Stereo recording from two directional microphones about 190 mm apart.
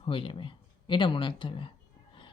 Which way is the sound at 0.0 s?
30° left (ahead or behind).